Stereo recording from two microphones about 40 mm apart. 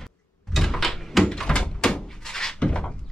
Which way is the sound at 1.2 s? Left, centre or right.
Centre.